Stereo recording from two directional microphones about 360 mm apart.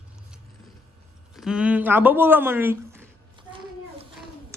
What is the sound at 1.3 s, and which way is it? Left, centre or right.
Speech, centre.